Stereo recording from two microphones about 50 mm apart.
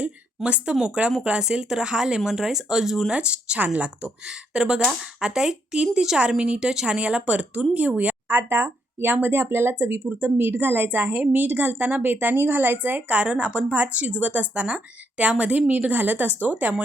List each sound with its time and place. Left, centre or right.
0.4 s speech: right; by 3.1 s centre
3.1 s speech: right
8.3 s speech: right
10.0 s a woman's voice: right